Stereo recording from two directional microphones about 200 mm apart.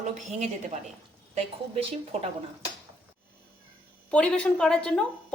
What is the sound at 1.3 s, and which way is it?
Speech, 30° right (ahead or behind).